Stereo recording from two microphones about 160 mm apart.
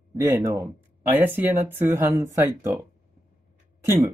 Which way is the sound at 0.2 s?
20° right (ahead or behind).